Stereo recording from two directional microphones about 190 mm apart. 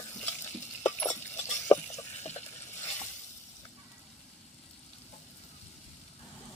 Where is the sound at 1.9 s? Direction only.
35° left (ahead or behind).